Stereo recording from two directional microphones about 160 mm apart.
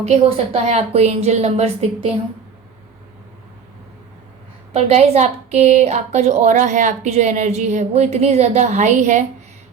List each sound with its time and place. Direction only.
0.0 s a woman's voice: 40° right (ahead or behind)
4.7 s a woman's voice: 45° right (ahead or behind)